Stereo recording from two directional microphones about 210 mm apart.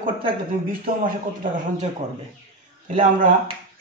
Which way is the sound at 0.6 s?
40° right (ahead or behind).